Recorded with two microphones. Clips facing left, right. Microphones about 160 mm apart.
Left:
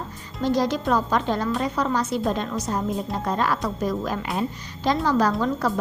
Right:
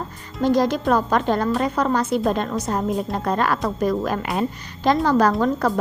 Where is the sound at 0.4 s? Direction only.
55° right (ahead or behind).